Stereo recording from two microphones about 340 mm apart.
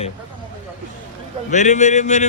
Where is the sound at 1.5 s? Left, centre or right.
Left.